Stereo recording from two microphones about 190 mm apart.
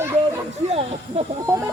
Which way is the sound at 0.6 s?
35° right (ahead or behind).